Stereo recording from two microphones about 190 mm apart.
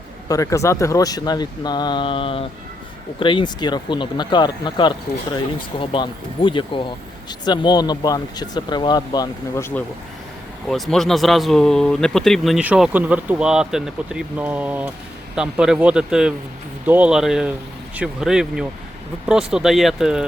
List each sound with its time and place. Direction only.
0.3 s speech: 15° left (ahead or behind)
10.7 s speech: centre (ahead or behind)